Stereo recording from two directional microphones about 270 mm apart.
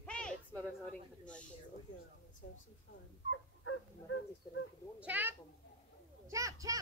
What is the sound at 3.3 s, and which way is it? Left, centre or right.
Dog, left.